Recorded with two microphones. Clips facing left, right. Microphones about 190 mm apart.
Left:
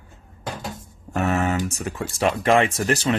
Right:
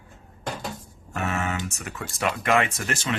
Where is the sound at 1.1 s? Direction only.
35° left (ahead or behind).